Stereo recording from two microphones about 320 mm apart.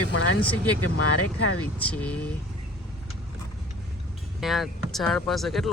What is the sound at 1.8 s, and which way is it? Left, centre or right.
Speech, centre.